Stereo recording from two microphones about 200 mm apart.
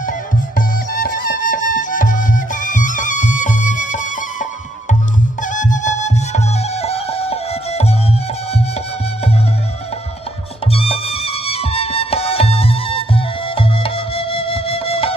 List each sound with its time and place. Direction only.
0.0 s music: 40° left (ahead or behind)
10.7 s music: 30° left (ahead or behind)